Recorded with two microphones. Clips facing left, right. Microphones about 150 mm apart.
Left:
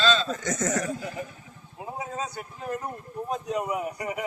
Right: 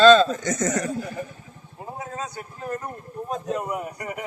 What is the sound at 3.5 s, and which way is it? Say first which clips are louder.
Speech: even; 10° left (ahead or behind).